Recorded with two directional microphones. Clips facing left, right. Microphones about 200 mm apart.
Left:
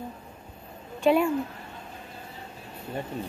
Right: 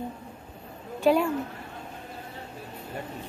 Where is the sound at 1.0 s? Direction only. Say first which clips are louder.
Even; 5° left (ahead or behind).